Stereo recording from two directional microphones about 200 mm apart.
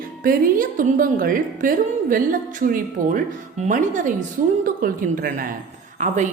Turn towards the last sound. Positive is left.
turn(degrees=-35)  # may be behind; listen again after turning